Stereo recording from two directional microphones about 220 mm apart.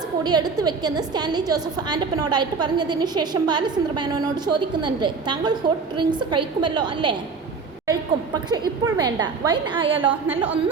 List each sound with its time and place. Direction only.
0.2 s a woman's voice: 20° right (ahead or behind)